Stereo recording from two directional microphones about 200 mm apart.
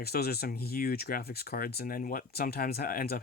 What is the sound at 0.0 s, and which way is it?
Speech, 50° left (ahead or behind).